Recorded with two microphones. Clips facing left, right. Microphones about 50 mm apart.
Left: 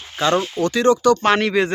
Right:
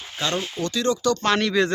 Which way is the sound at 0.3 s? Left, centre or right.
Left.